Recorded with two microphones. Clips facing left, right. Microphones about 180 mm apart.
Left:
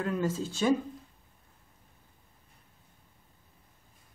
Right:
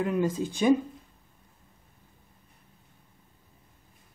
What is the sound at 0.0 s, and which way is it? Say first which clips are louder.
Speech: right 4 dB; 15° right (ahead or behind).